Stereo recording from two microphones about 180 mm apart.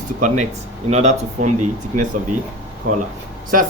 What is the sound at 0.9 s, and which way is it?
Speech, 40° right (ahead or behind).